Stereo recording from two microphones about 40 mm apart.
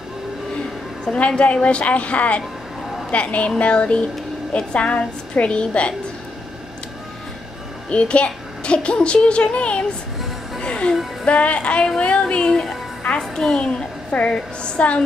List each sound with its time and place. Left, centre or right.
1.1 s a woman's voice: left
7.9 s a child's voice: left; by 13.6 s centre
13.6 s a child's voice: left